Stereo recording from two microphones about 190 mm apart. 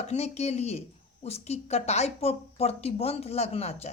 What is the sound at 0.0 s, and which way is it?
Speech, 35° left (ahead or behind).